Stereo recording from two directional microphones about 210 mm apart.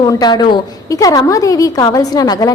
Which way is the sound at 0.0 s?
20° left (ahead or behind).